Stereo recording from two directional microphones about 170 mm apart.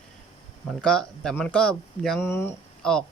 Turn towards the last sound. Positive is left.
turn(degrees=5)  # may be behind; listen again after turning